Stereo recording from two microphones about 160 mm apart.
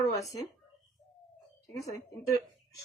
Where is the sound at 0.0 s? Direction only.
20° left (ahead or behind).